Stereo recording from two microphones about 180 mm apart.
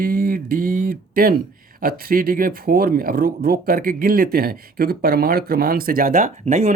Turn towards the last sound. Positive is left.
turn(degrees=-40)  # may be behind; listen again after turning